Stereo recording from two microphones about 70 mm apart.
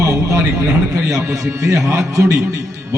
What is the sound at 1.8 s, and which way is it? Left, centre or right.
Speech, right.